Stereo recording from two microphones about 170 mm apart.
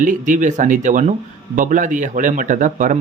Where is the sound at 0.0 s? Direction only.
50° right (ahead or behind).